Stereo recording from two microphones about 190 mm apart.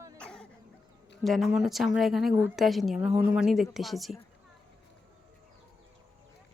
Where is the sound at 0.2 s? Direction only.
5° left (ahead or behind).